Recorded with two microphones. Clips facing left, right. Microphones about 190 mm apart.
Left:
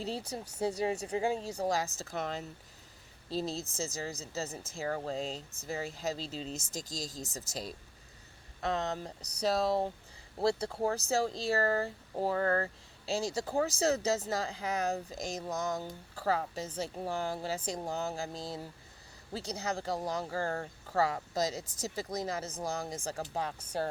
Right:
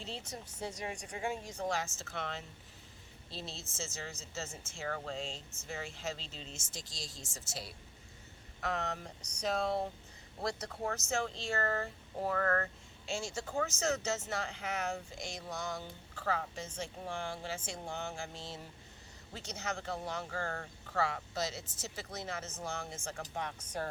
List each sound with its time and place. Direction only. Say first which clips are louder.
0.0 s speech: left 7 dB; 35° left (ahead or behind)